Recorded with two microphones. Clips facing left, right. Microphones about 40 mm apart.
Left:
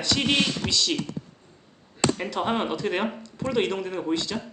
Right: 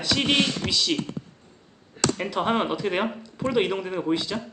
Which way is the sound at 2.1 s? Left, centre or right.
Centre.